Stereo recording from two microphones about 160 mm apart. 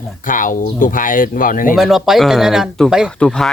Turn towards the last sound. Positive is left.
turn(degrees=5)  # may be behind; listen again after turning